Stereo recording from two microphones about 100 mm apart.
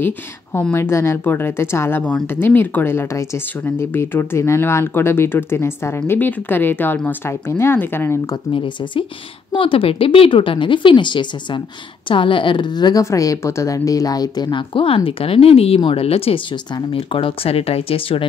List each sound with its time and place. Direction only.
0.0 s speech: 20° left (ahead or behind)
9.5 s speech: 60° left (ahead or behind)
13.0 s a woman's voice: 35° left (ahead or behind)
14.7 s speech: 65° left (ahead or behind)
16.7 s speech: 65° left (ahead or behind)